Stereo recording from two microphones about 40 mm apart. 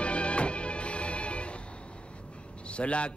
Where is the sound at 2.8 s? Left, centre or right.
Left.